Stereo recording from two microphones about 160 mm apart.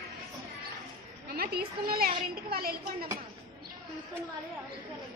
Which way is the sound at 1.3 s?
75° right (ahead or behind).